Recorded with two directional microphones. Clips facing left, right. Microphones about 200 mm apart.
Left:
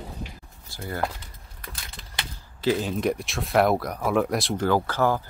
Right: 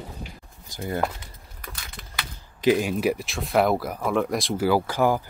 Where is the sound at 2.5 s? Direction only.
15° right (ahead or behind).